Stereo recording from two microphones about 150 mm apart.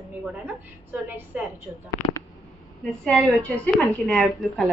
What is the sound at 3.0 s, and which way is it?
A woman's voice, 5° left (ahead or behind).